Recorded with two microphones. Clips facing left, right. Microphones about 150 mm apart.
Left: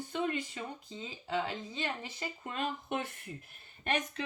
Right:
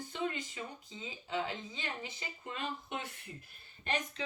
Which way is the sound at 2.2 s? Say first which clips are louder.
Left 5 dB; 50° left (ahead or behind).